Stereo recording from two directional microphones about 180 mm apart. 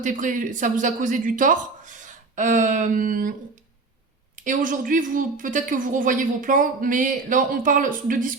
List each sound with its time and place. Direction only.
0.0 s a woman's voice: 45° right (ahead or behind)
4.4 s a woman's voice: 45° right (ahead or behind)